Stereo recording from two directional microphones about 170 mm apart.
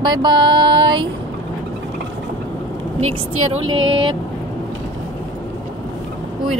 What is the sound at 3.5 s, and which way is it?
Speech, 30° right (ahead or behind).